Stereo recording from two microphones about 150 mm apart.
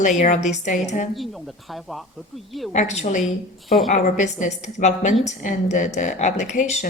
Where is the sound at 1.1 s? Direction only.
Centre (ahead or behind).